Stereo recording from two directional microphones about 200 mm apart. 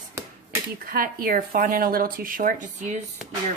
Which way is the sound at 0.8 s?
45° right (ahead or behind).